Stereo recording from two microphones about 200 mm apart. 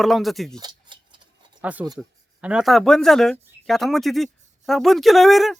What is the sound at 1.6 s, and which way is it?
Speech, 5° right (ahead or behind).